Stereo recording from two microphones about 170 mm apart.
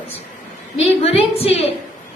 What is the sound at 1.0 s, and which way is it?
Speech, 35° left (ahead or behind).